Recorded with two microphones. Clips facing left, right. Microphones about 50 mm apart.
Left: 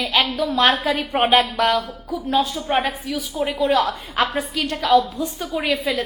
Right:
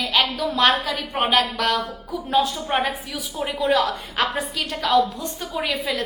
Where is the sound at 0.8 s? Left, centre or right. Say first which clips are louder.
Left 4 dB; left.